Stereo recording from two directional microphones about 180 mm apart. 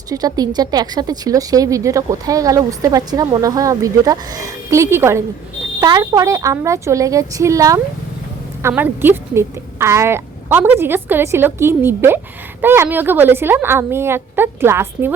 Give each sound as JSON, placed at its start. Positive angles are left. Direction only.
{"t": 0.1, "sound": "a woman's voice", "side_deg": -20}